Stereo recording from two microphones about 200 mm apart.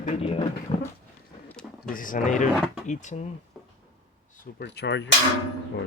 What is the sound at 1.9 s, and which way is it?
Speech, 40° left (ahead or behind).